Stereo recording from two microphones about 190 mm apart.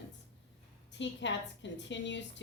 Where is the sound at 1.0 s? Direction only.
70° left (ahead or behind).